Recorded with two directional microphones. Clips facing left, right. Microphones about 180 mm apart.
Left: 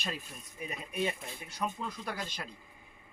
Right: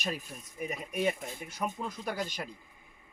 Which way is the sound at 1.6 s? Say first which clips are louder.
Right 1 dB; 15° right (ahead or behind).